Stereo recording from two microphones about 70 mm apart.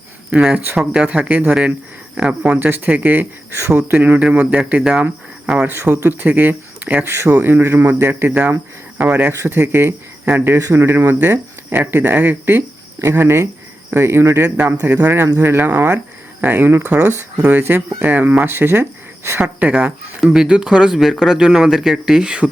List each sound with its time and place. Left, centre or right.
0.7 s speech: centre
2.6 s speech: right
5.9 s a man's voice: right
6.2 s speech: right
7.4 s a man's voice: right
9.0 s speech: right
9.3 s speech: right
9.6 s speech: right
10.6 s speech: right
10.8 s a man's voice: right
14.5 s a man's voice: right
19.4 s speech: right
20.2 s speech: centre